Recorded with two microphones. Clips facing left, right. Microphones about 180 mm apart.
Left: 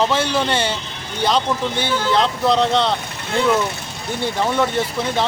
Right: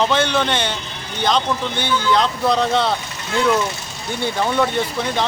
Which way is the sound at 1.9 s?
35° left (ahead or behind).